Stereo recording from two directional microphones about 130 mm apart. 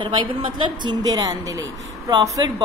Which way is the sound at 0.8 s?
30° right (ahead or behind).